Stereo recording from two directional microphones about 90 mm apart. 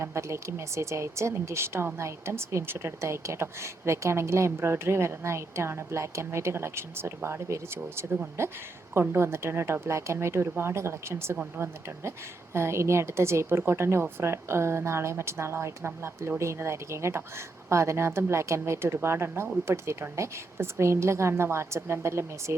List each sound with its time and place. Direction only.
0.0 s a woman's voice: 30° right (ahead or behind)